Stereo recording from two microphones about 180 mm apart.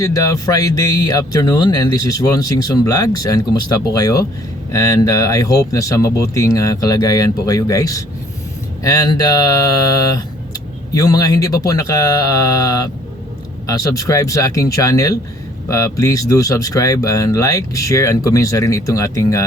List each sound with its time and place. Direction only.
0.0 s speech: 20° left (ahead or behind)